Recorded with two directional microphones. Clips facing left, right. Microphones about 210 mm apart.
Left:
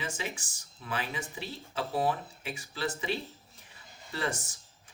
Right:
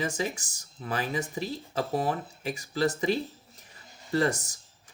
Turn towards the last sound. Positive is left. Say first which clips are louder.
# right 8 dB
turn(degrees=-40)  # may be behind; listen again after turning